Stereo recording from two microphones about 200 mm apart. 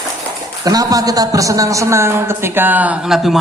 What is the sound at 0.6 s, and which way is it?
A woman's voice, 20° right (ahead or behind).